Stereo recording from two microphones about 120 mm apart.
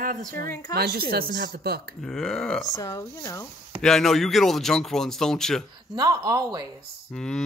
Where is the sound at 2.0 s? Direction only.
5° left (ahead or behind).